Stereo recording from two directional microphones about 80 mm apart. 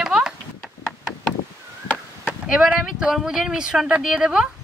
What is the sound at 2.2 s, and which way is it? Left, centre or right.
Speech, centre.